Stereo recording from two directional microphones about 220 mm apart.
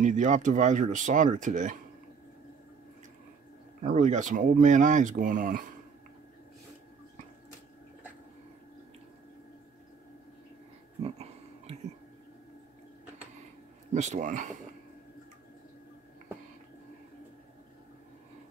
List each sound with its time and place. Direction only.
0.0 s speech: 35° right (ahead or behind)
3.8 s speech: 35° right (ahead or behind)
11.0 s a sound: 30° right (ahead or behind)
13.9 s speech: 30° right (ahead or behind)